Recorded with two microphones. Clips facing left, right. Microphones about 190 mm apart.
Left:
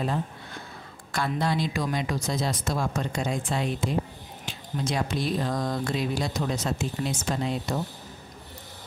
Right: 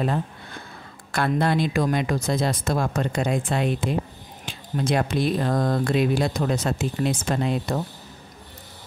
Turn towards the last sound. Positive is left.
turn(degrees=-60)  # may be behind; listen again after turning